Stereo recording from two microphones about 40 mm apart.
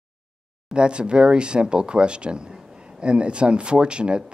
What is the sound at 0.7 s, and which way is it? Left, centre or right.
Speech, right.